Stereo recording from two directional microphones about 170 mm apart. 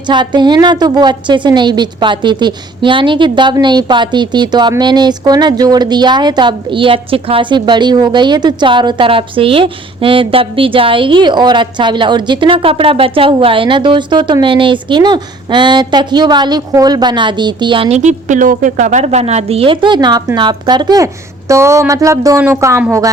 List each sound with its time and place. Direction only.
0.1 s a woman's voice: 25° right (ahead or behind)